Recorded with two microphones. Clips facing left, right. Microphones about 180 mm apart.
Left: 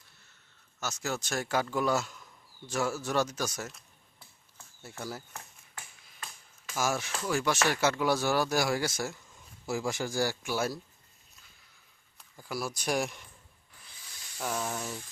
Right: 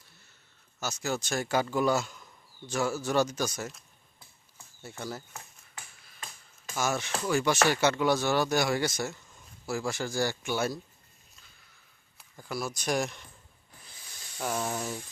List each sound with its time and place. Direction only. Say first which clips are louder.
0.8 s speech: right 2 dB; centre (ahead or behind)
6.7 s speech: right 1 dB; 5° left (ahead or behind)
9.6 s speech: even; 15° left (ahead or behind)
12.4 s speech: right 1 dB; 5° left (ahead or behind)
14.3 s speech: right 2 dB; 5° right (ahead or behind)